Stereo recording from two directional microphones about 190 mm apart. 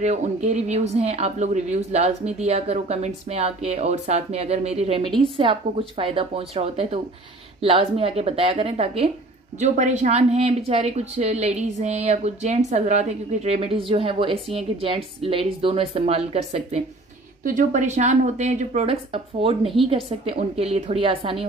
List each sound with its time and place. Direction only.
0.0 s speech: 40° right (ahead or behind)
17.4 s speech: 45° right (ahead or behind); by 21.5 s 30° right (ahead or behind)